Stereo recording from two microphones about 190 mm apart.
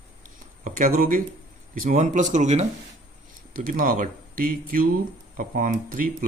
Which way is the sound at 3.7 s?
45° right (ahead or behind).